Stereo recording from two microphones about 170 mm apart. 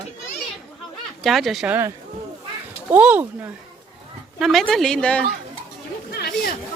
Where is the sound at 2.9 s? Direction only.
10° right (ahead or behind).